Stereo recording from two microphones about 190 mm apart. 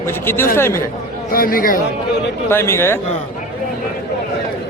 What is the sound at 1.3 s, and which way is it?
Speech, 50° left (ahead or behind).